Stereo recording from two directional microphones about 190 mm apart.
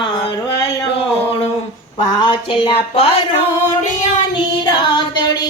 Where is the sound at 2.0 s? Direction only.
25° left (ahead or behind).